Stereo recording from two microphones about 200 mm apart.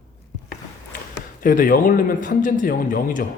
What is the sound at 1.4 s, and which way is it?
Speech, 45° left (ahead or behind).